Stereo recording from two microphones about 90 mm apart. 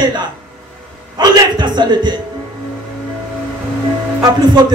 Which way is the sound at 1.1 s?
50° right (ahead or behind).